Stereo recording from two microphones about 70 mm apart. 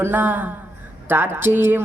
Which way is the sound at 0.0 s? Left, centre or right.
Right.